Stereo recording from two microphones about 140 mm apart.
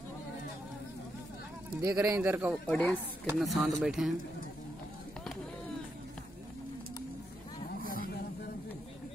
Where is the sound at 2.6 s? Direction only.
10° left (ahead or behind).